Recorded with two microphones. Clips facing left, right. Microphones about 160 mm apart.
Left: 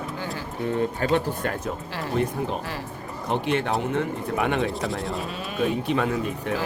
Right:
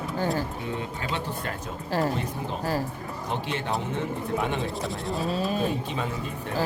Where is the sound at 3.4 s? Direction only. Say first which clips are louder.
Left 7 dB; 60° left (ahead or behind).